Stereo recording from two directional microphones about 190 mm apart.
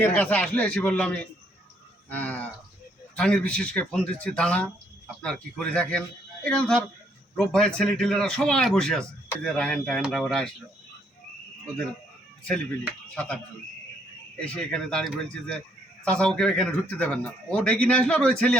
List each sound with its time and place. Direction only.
0.0 s a man's voice: 10° left (ahead or behind)
13.1 s a man's voice: 5° left (ahead or behind)